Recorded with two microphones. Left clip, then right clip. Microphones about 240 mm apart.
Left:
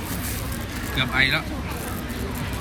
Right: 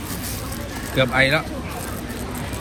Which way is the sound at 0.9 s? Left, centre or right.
Centre.